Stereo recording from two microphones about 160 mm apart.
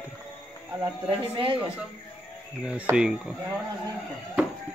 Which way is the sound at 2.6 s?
5° right (ahead or behind).